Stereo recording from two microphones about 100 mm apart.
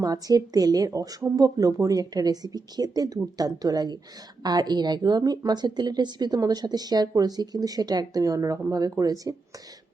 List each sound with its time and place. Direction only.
0.0 s a woman's voice: 40° right (ahead or behind)